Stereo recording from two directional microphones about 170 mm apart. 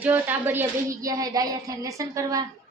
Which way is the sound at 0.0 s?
10° right (ahead or behind).